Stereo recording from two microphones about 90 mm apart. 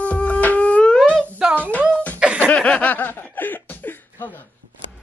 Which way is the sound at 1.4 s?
10° right (ahead or behind).